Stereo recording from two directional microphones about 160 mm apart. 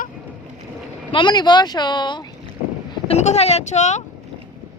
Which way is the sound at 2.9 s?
40° left (ahead or behind).